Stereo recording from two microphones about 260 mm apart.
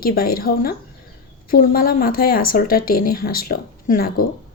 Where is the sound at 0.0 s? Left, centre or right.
Left.